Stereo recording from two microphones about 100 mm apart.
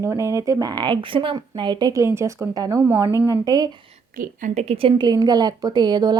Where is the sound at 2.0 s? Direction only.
30° right (ahead or behind).